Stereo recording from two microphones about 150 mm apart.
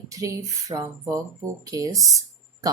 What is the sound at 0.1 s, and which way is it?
A woman's voice, 20° right (ahead or behind).